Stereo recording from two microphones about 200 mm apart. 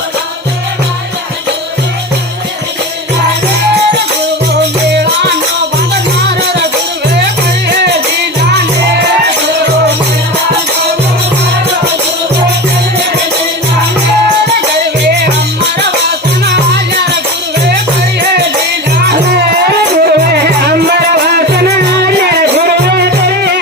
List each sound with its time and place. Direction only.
4.9 s music: 55° right (ahead or behind)
7.7 s music: 55° right (ahead or behind)
16.7 s music: 55° right (ahead or behind)
20.1 s music: 50° right (ahead or behind)